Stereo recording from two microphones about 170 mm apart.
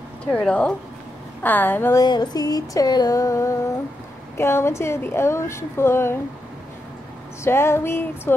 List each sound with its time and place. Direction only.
0.2 s a woman's voice: 5° left (ahead or behind)
2.0 s music: 25° left (ahead or behind)
4.4 s a woman's voice: 15° left (ahead or behind)
7.4 s a woman's voice: 15° left (ahead or behind)